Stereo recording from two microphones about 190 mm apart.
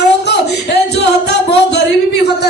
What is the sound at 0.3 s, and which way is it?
Singing, 60° left (ahead or behind).